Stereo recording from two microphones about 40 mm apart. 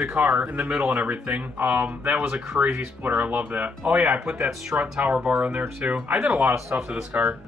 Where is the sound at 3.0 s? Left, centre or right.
Right.